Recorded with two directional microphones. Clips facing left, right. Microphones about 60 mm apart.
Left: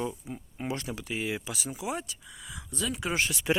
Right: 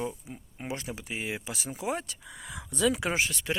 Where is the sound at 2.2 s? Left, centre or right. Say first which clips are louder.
Right 3 dB; right.